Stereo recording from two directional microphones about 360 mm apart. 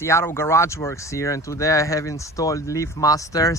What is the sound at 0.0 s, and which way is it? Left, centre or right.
Speech, centre.